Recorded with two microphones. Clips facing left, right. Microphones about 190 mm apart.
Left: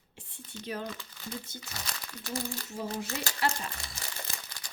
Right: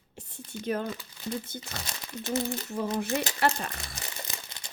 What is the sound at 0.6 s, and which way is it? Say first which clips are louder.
Speech: right 7 dB; 55° right (ahead or behind).